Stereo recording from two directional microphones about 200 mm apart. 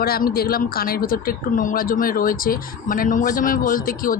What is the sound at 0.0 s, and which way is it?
Speech, 50° left (ahead or behind).